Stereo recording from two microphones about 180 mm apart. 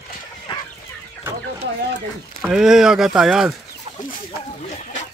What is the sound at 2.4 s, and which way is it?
Speech, 5° right (ahead or behind).